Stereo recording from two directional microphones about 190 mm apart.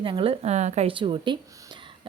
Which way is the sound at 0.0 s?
30° right (ahead or behind).